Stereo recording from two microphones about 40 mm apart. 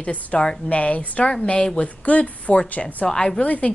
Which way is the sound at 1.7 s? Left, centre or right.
Left.